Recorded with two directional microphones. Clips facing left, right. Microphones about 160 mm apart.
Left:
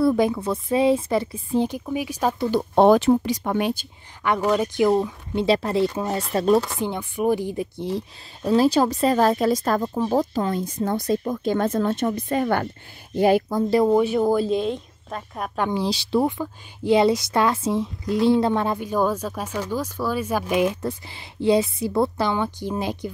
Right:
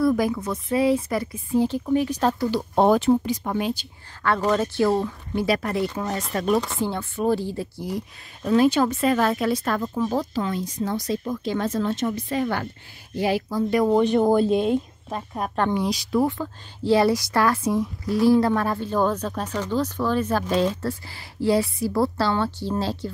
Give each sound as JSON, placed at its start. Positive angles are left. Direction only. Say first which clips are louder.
{"t": 0.0, "sound": "speech", "louder": "left 2 dB", "side_deg": 25}
{"t": 1.9, "sound": "speech", "louder": "right 3 dB", "side_deg": 10}
{"t": 2.7, "sound": "speech", "louder": "left 3 dB", "side_deg": 85}
{"t": 4.2, "sound": "speech", "louder": "left 1 dB", "side_deg": 15}
{"t": 6.8, "sound": "speech", "louder": "left 1 dB", "side_deg": 15}
{"t": 8.5, "sound": "speech", "louder": "left 1 dB", "side_deg": 35}
{"t": 13.8, "sound": "a woman's voice", "louder": "even", "side_deg": 10}
{"t": 15.4, "sound": "speech", "louder": "right 1 dB", "side_deg": 5}
{"t": 15.7, "sound": "speech", "louder": "left 1 dB", "side_deg": 30}
{"t": 16.3, "sound": "speech", "louder": "left 1 dB", "side_deg": 15}